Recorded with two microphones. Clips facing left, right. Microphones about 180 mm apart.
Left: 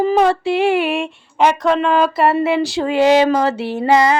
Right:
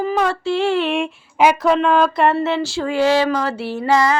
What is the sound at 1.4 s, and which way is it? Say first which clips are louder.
Speech: even; 5° right (ahead or behind).